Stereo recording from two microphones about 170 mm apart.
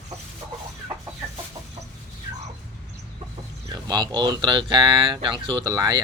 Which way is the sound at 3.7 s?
25° right (ahead or behind).